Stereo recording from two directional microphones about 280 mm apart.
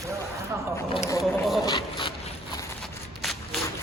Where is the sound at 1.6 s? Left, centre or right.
Centre.